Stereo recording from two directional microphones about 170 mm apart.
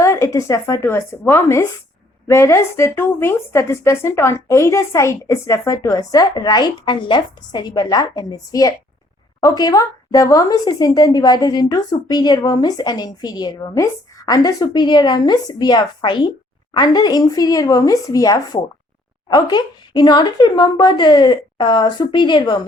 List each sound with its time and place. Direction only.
0.0 s speech: 20° left (ahead or behind)